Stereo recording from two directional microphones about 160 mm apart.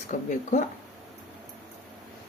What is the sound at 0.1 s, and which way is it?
Speech, 50° left (ahead or behind).